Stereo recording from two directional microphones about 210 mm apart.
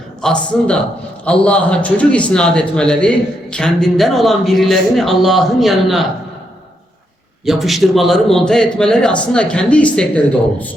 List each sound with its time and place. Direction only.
0.2 s a man's voice: 5° left (ahead or behind)
7.4 s a man's voice: centre (ahead or behind)